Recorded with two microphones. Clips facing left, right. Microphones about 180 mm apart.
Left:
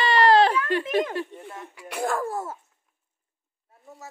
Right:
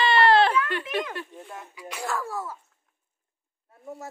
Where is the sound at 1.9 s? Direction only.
50° left (ahead or behind).